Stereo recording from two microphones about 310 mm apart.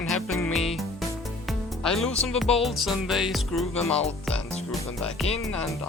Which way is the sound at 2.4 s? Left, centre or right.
Centre.